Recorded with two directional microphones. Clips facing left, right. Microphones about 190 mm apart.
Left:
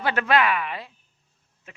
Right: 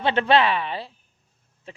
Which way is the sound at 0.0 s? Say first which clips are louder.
Right 3 dB; 25° right (ahead or behind).